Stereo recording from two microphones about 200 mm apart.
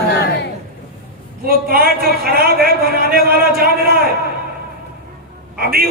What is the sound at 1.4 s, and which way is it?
A man's voice, 50° right (ahead or behind).